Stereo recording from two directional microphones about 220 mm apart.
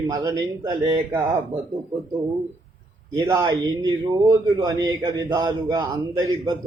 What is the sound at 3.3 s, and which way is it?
Speech, 20° right (ahead or behind).